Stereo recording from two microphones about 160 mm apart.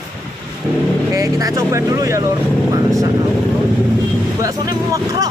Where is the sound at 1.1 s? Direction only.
20° right (ahead or behind).